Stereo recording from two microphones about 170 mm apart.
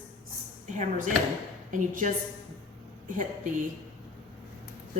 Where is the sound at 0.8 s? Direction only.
50° right (ahead or behind).